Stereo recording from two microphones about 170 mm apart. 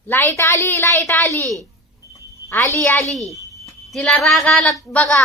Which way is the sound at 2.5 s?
15° left (ahead or behind).